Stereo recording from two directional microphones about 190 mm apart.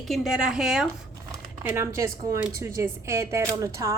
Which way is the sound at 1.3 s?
15° right (ahead or behind).